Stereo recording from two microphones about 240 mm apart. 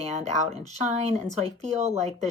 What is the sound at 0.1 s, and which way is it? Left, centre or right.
Speech, right.